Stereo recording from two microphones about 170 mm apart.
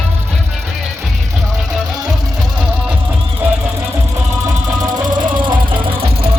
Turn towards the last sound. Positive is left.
turn(degrees=-30)  # may be behind; listen again after turning